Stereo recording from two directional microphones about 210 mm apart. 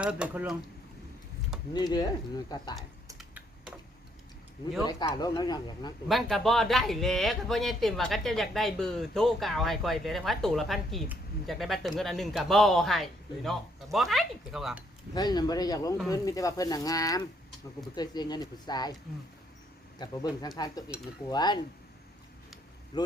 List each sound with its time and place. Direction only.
0.0 s speech: 5° right (ahead or behind)
1.7 s speech: 20° left (ahead or behind)
3.2 s typing: 5° right (ahead or behind)
4.8 s speech: 20° left (ahead or behind)
6.1 s speech: centre (ahead or behind)
15.1 s speech: 20° left (ahead or behind)
20.0 s speech: 20° left (ahead or behind)
22.9 s speech: 20° left (ahead or behind)